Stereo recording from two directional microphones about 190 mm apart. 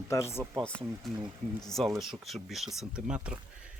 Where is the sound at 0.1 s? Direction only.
15° left (ahead or behind); by 3.3 s 5° right (ahead or behind).